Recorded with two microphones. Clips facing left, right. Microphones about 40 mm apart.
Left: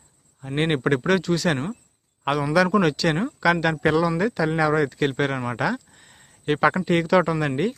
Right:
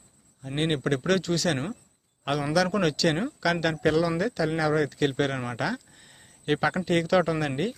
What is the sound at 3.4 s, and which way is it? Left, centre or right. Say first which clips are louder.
Speech: left 5 dB; centre.